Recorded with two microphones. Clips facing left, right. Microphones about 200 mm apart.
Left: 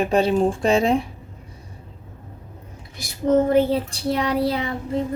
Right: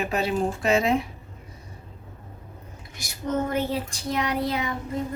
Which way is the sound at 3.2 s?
35° left (ahead or behind).